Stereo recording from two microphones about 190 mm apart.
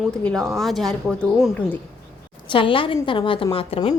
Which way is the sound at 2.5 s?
25° left (ahead or behind).